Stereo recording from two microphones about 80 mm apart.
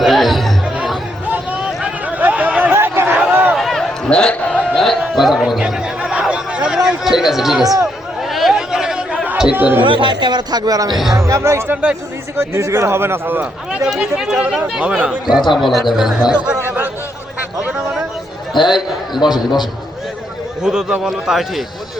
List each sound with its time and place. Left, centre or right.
0.0 s chatter: centre
1.6 s chatter: centre
3.5 s a sound: centre
5.4 s chatter: centre
8.3 s a sound: centre
9.5 s a man's voice: right
9.8 s speech: right
11.1 s speech: right
11.7 s a man's voice: right
12.4 s a man's voice: right; by 16.6 s centre
17.6 s a sound: centre
18.7 s a man's voice: centre
19.3 s a man's voice: left
20.6 s a man's voice: centre